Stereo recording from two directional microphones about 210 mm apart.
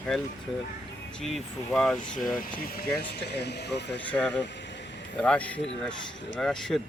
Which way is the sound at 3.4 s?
50° left (ahead or behind).